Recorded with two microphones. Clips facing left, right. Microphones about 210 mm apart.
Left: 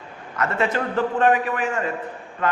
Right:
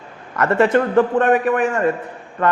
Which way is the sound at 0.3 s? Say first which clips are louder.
Right 8 dB; 55° right (ahead or behind).